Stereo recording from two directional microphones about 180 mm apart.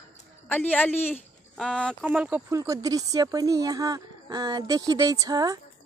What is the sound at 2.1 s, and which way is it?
A woman's voice, 10° right (ahead or behind).